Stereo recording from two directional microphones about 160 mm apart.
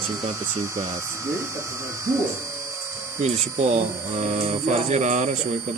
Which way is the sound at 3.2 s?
45° right (ahead or behind).